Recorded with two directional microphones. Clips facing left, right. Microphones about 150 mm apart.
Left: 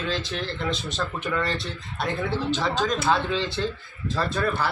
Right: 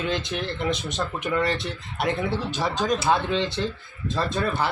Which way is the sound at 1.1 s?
20° right (ahead or behind).